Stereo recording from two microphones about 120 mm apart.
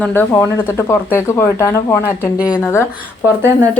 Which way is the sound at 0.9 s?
25° left (ahead or behind).